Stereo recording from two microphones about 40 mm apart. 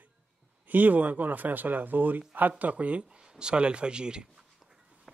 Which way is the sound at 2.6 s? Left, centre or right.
Right.